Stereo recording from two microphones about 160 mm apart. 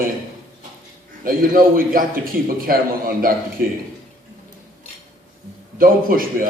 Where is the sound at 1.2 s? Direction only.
60° right (ahead or behind).